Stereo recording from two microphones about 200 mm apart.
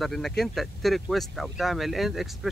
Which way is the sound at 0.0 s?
Centre (ahead or behind).